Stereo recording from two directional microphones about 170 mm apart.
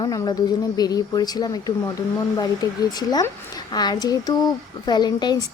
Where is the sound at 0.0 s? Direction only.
25° left (ahead or behind).